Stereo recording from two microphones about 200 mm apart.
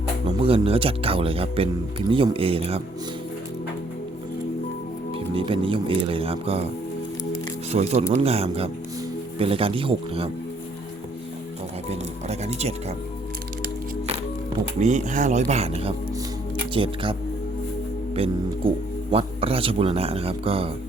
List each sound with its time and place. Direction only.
0.3 s speech: 30° right (ahead or behind)
5.1 s speech: 25° right (ahead or behind)
7.7 s speech: 30° right (ahead or behind)
11.9 s speech: 35° right (ahead or behind)
14.8 s speech: 35° right (ahead or behind)